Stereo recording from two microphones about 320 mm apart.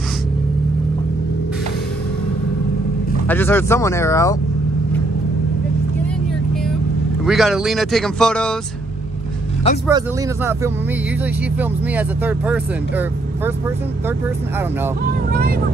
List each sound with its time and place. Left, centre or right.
3.3 s speech: centre
7.2 s speech: centre
9.8 s speech: centre
11.9 s speech: centre